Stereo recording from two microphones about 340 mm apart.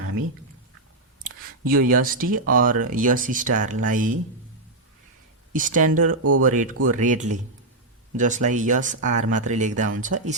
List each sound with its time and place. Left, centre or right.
1.2 s speech: right
5.5 s speech: right
6.1 s speech: right
6.4 s speech: right